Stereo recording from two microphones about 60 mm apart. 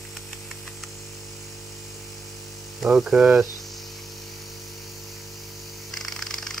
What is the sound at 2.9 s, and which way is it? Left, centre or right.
Speech, centre.